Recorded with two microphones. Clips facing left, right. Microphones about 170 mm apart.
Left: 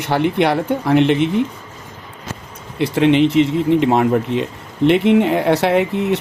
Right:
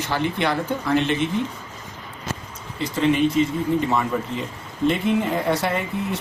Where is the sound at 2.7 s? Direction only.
70° left (ahead or behind).